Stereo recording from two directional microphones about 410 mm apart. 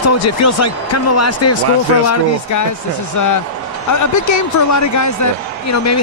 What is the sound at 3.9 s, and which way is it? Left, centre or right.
A man's voice, left.